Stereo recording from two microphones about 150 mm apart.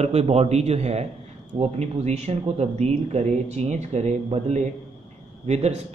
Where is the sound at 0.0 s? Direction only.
45° right (ahead or behind).